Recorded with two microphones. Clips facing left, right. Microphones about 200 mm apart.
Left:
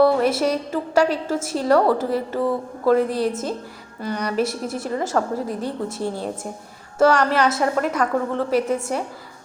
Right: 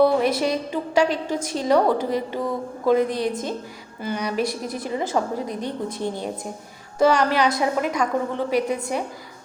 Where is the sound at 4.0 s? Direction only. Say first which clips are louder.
Left 2 dB; 5° right (ahead or behind).